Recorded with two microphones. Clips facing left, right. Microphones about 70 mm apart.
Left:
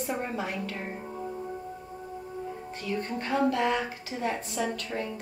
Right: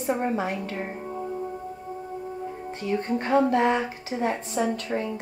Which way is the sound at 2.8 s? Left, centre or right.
Right.